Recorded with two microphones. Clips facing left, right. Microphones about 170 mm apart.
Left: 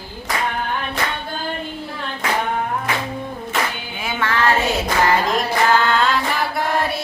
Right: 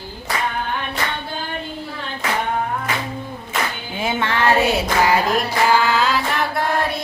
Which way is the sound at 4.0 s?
20° right (ahead or behind).